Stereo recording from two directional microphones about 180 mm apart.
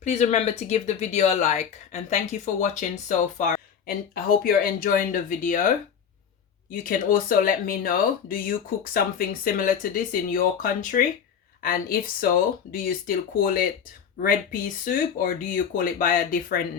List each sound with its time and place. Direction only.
0.0 s speech: 40° left (ahead or behind)
6.8 s speech: 50° left (ahead or behind)